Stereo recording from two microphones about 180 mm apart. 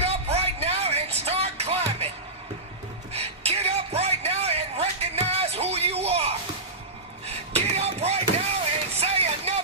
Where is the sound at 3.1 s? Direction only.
35° right (ahead or behind).